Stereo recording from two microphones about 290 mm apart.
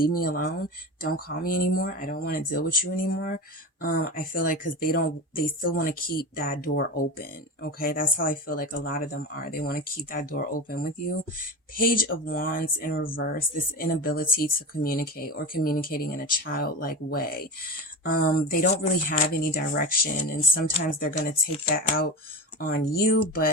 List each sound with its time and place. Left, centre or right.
0.0 s speech: left
18.5 s speech: left